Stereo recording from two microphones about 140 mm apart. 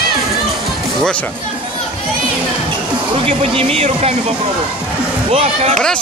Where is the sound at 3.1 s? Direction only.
45° right (ahead or behind).